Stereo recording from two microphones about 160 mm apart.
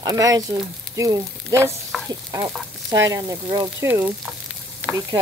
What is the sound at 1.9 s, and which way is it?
Stir, centre (ahead or behind).